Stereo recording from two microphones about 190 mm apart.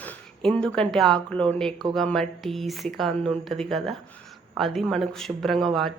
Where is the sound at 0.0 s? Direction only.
5° left (ahead or behind).